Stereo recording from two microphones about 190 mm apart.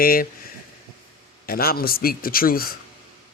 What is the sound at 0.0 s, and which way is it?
Speech, 50° left (ahead or behind).